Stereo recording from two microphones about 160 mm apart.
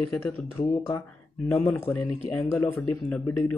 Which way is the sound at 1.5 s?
10° left (ahead or behind).